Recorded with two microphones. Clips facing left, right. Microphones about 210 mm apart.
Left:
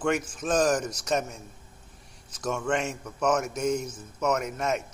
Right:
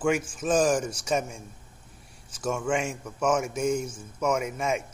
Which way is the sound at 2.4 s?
10° right (ahead or behind).